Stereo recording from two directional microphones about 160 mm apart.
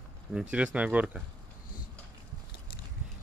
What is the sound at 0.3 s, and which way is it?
Speech, 5° right (ahead or behind).